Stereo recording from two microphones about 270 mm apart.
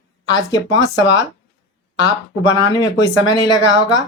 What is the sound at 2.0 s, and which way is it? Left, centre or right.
Speech, centre.